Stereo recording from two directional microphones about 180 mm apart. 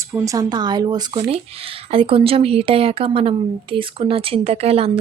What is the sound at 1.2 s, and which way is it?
A woman's voice, 35° right (ahead or behind).